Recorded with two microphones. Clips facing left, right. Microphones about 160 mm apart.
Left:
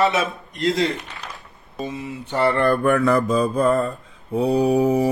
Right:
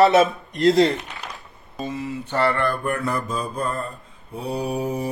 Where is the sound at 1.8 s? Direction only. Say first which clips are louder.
Right 1 dB; 15° left (ahead or behind).